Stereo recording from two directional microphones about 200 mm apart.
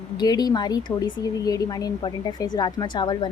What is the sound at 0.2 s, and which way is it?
Speech, 20° left (ahead or behind).